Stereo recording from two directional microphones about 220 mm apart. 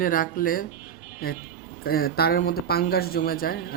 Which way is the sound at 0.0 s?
40° left (ahead or behind).